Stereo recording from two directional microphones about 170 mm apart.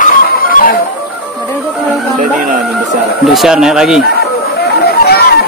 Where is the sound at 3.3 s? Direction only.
Centre (ahead or behind).